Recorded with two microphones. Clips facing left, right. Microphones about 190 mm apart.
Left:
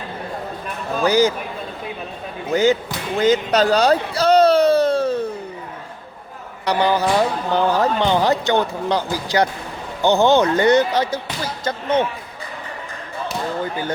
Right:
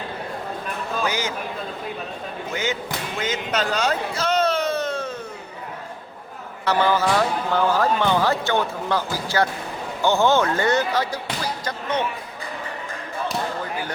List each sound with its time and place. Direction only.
1.0 s a man's voice: 35° left (ahead or behind)
2.5 s a man's voice: 35° left (ahead or behind)
3.2 s a sound: 35° left (ahead or behind)
6.7 s speech: 15° left (ahead or behind)